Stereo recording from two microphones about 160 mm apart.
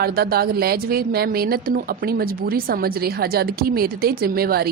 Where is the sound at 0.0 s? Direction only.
70° right (ahead or behind).